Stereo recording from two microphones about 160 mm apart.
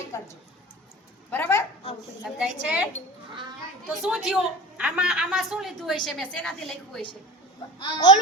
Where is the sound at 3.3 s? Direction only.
30° right (ahead or behind).